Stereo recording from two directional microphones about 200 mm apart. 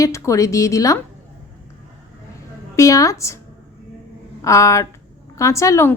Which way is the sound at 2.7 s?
15° left (ahead or behind).